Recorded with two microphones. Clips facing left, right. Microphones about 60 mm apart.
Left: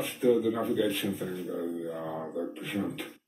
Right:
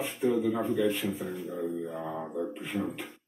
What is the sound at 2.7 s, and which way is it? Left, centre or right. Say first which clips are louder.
Speech: even; left.